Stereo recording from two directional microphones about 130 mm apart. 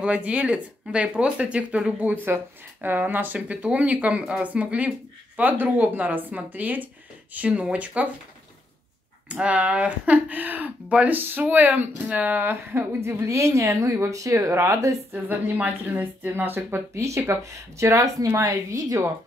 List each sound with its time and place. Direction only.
0.0 s speech: 10° right (ahead or behind)
9.3 s speech: 10° right (ahead or behind); by 15.0 s 25° right (ahead or behind)
15.2 s speech: 15° right (ahead or behind)